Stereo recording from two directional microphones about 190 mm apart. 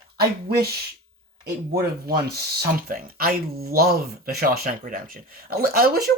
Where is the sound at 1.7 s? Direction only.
55° right (ahead or behind).